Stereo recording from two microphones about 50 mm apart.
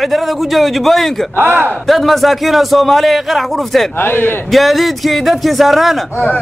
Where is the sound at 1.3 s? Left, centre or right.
Right.